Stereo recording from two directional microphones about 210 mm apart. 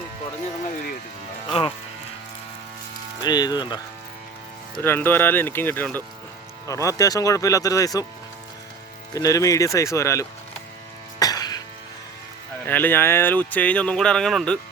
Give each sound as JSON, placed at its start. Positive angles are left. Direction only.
{"t": 1.5, "sound": "speech", "side_deg": 25}
{"t": 3.2, "sound": "speech", "side_deg": 20}
{"t": 4.8, "sound": "speech", "side_deg": 10}
{"t": 9.1, "sound": "speech", "side_deg": 15}
{"t": 11.2, "sound": "cough", "side_deg": 20}
{"t": 12.6, "sound": "speech", "side_deg": 10}